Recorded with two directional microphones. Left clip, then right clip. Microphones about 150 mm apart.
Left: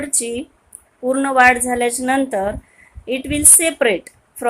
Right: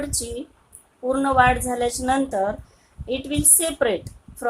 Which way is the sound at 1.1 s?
40° left (ahead or behind).